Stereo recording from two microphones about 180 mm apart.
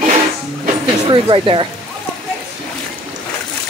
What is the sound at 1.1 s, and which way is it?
Speech, 25° right (ahead or behind).